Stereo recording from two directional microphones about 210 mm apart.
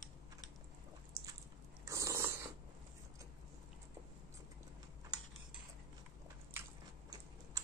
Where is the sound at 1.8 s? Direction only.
15° right (ahead or behind).